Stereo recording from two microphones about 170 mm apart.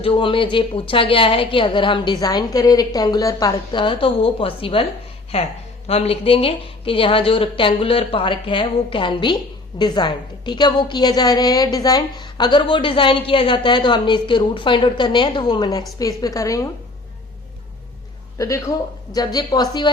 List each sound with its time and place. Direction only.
0.0 s a woman's voice: 30° left (ahead or behind)
5.9 s a woman's voice: 35° left (ahead or behind); by 16.6 s 20° left (ahead or behind)
18.3 s a woman's voice: 20° left (ahead or behind)